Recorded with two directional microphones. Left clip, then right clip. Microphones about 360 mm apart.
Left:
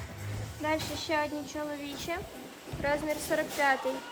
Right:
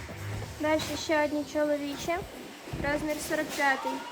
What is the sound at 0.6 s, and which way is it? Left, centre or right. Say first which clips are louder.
A woman's voice: right 3 dB; centre.